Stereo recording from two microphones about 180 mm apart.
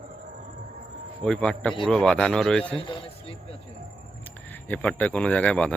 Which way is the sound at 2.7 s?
30° left (ahead or behind).